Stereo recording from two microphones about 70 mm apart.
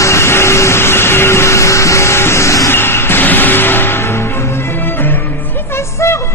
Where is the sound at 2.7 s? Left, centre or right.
Left.